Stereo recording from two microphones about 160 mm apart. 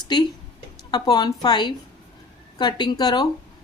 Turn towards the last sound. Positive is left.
turn(degrees=25)  # may be behind; listen again after turning